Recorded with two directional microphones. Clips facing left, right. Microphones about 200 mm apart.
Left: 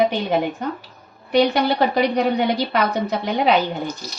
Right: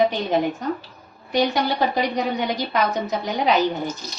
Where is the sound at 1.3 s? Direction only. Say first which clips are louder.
Left 4 dB; 65° left (ahead or behind).